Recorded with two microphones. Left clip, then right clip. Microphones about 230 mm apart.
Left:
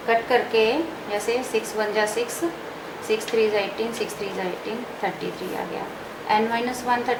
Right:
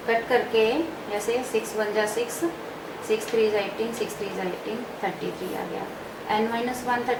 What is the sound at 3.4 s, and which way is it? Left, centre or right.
Speech, centre.